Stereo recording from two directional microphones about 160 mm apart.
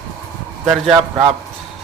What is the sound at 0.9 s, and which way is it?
Speech, 30° right (ahead or behind).